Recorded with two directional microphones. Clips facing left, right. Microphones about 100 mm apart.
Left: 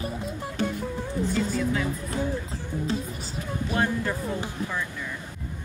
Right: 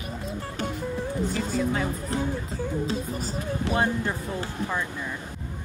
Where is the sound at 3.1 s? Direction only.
45° right (ahead or behind).